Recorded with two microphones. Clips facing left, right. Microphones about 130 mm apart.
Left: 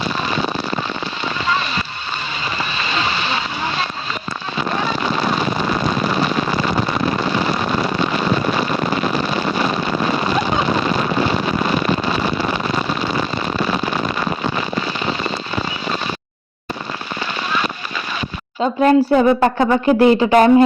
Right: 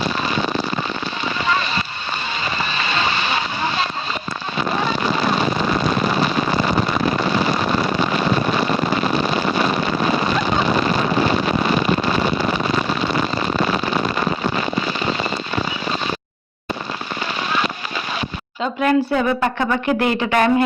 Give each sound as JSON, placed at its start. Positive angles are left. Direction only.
{"t": 18.6, "sound": "a woman's voice", "side_deg": 35}